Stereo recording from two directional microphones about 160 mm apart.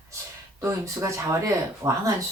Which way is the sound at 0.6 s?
20° right (ahead or behind).